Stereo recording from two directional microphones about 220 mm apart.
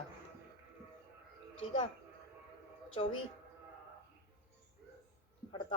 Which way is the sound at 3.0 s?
25° left (ahead or behind).